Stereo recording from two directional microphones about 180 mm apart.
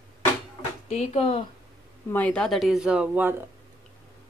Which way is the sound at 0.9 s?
35° left (ahead or behind).